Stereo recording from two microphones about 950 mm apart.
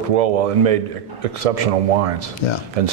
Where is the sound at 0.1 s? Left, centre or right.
Right.